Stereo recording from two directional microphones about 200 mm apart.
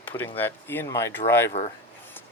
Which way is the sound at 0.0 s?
10° left (ahead or behind).